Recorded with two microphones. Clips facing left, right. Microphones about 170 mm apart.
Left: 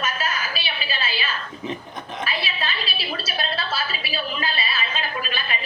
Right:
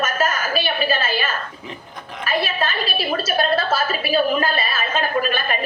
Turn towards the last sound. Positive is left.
turn(degrees=-50)  # may be behind; listen again after turning